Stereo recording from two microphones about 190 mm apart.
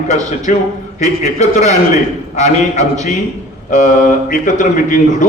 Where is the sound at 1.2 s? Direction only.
40° left (ahead or behind).